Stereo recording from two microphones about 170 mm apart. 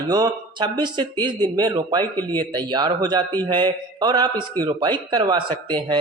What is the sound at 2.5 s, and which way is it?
A man's voice, 25° right (ahead or behind).